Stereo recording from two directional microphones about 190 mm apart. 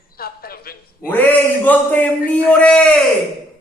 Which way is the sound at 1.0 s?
10° left (ahead or behind).